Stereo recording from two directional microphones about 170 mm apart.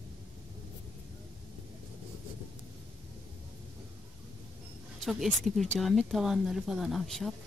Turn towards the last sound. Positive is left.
turn(degrees=0)  # may be behind; listen again after turning